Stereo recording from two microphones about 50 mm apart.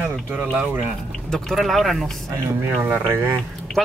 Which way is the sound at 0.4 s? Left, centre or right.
Right.